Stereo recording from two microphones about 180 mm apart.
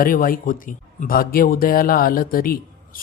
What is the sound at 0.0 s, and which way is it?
Speech, 50° left (ahead or behind).